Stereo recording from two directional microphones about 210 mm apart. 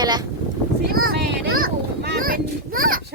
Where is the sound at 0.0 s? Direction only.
20° right (ahead or behind).